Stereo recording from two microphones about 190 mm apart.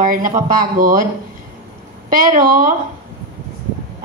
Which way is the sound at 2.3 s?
45° right (ahead or behind).